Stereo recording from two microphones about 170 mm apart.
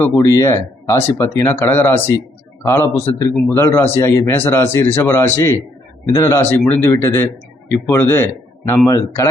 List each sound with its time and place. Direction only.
0.0 s a man's voice: 20° left (ahead or behind)